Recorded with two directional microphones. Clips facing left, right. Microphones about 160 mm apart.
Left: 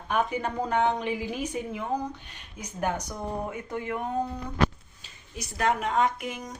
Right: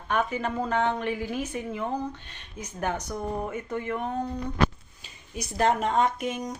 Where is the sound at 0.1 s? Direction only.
15° left (ahead or behind).